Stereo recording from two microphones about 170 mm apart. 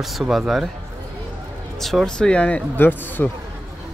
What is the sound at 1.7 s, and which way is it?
Speech, centre (ahead or behind).